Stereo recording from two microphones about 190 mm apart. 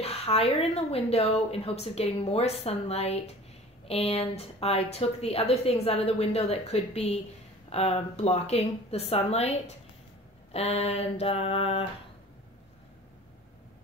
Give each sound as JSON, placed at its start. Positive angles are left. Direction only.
{"t": 0.0, "sound": "speech", "side_deg": 30}